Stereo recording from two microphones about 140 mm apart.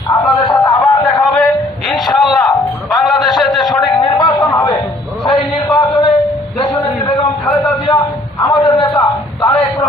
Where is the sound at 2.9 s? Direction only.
Centre (ahead or behind).